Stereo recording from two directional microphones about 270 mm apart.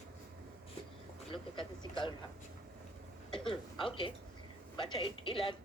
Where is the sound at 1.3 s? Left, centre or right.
Centre.